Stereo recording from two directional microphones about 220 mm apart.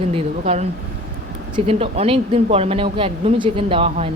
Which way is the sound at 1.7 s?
25° right (ahead or behind).